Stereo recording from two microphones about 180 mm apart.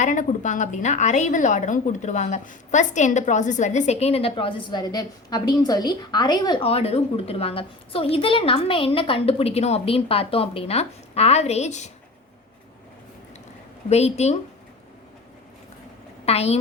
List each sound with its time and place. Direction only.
0.0 s a woman's voice: 45° left (ahead or behind)
13.9 s a woman's voice: 35° left (ahead or behind)
16.2 s a woman's voice: 35° left (ahead or behind)